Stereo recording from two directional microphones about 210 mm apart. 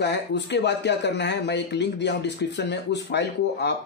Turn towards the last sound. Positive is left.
turn(degrees=55)  # may be behind; listen again after turning